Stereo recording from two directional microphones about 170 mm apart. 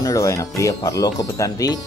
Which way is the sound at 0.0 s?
20° left (ahead or behind).